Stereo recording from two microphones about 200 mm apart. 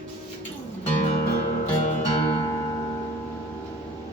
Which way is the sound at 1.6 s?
35° left (ahead or behind).